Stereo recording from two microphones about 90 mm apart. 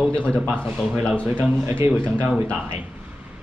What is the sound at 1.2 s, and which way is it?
Speech, 15° right (ahead or behind).